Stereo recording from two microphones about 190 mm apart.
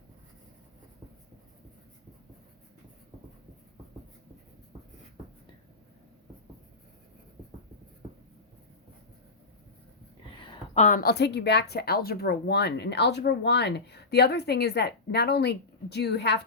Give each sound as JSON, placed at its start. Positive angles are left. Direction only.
{"t": 10.8, "sound": "speech", "side_deg": 40}